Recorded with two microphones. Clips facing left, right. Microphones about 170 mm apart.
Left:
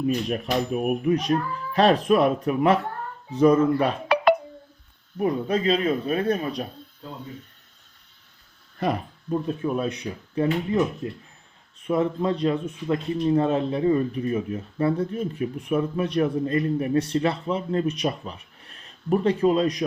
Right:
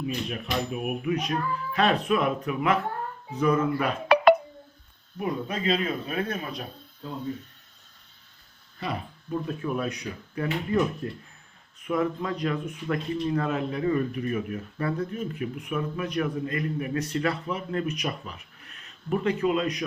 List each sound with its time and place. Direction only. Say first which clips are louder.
0.0 s speech: left 7 dB; 40° left (ahead or behind)
5.2 s speech: left 6 dB; 35° left (ahead or behind)
9.3 s speech: left 4 dB; 25° left (ahead or behind)